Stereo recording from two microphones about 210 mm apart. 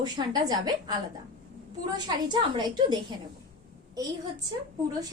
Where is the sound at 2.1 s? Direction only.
20° right (ahead or behind).